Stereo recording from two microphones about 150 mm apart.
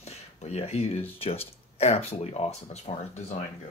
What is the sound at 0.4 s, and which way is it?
Speech, 45° left (ahead or behind).